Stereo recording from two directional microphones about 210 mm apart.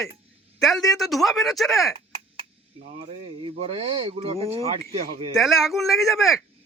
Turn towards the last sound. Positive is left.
turn(degrees=0)  # may be behind; listen again after turning